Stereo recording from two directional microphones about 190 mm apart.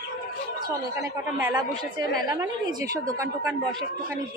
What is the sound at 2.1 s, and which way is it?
A woman's voice, 20° right (ahead or behind).